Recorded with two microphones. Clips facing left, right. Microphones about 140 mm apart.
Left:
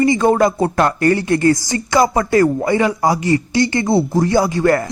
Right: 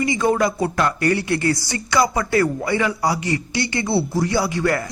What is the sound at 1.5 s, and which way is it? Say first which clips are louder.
Speech: left 7 dB; 20° left (ahead or behind).